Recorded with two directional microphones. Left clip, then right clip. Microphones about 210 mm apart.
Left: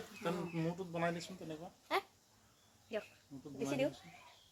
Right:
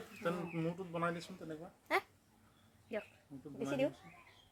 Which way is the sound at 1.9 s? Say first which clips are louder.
Right 2 dB; 25° right (ahead or behind).